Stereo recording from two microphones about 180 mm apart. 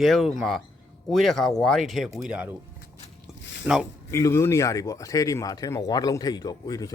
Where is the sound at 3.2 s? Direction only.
5° right (ahead or behind).